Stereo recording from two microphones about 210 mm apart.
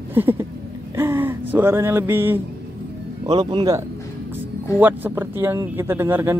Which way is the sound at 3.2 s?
25° right (ahead or behind).